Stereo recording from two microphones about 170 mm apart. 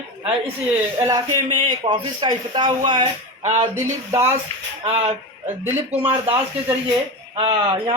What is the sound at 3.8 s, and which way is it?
Speech, 15° right (ahead or behind).